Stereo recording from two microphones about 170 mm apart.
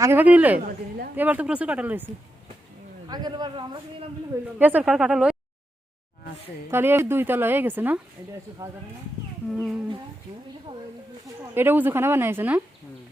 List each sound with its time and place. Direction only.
0.0 s speech: 10° right (ahead or behind)
3.1 s a man's voice: 25° right (ahead or behind)
4.5 s speech: 10° right (ahead or behind)
6.7 s speech: 15° right (ahead or behind)
9.5 s speech: 5° right (ahead or behind)
10.7 s a man's voice: 30° right (ahead or behind)
11.5 s speech: 10° right (ahead or behind)